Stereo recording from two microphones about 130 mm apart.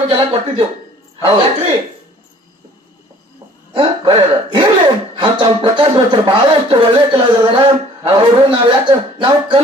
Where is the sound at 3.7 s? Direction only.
35° right (ahead or behind).